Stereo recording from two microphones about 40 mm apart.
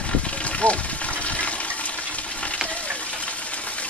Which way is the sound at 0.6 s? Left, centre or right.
Left.